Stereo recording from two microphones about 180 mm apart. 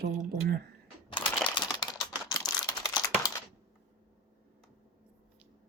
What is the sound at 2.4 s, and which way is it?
Computer keyboard, 5° left (ahead or behind).